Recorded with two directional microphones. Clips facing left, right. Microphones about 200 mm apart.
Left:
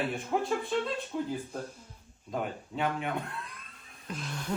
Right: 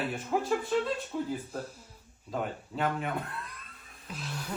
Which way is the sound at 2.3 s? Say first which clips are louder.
Even; centre (ahead or behind).